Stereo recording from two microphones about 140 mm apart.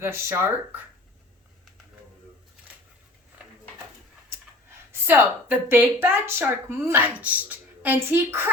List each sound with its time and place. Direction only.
0.0 s speech: 20° right (ahead or behind)
4.7 s a sound: 15° right (ahead or behind)
5.5 s speech: 15° right (ahead or behind)